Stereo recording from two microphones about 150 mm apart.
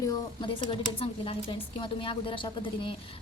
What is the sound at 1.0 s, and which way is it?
A woman's voice, 35° left (ahead or behind).